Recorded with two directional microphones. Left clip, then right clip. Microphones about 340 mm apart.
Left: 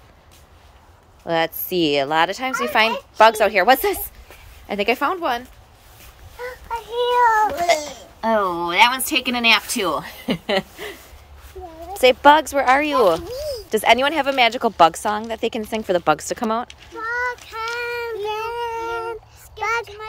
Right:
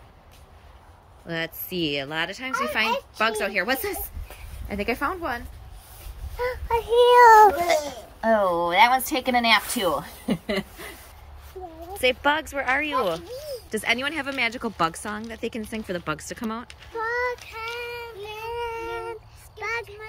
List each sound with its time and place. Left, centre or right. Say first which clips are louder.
1.2 s a woman's voice: left 10 dB; centre
6.3 s child singing: right 4 dB; right
7.6 s a child's voice: left 4 dB; centre
12.0 s a woman's voice: left 10 dB; centre
16.6 s child singing: left 1 dB; centre